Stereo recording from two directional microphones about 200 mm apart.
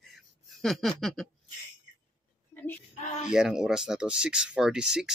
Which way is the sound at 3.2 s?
5° right (ahead or behind).